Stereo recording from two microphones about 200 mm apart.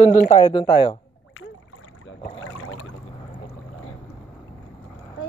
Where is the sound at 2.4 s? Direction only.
90° left.